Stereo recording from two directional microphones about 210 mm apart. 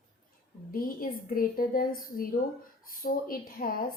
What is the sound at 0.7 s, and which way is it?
A woman's voice, 45° left (ahead or behind).